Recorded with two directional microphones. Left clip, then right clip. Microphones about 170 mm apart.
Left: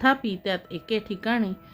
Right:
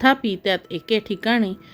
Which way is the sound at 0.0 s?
35° right (ahead or behind).